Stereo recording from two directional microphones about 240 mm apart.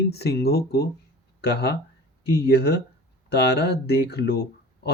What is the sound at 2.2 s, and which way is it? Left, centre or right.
Speech, left.